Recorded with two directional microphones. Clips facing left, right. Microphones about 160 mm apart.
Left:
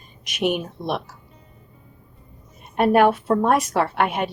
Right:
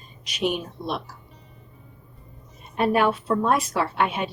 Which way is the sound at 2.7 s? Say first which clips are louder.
Left 5 dB; 55° left (ahead or behind).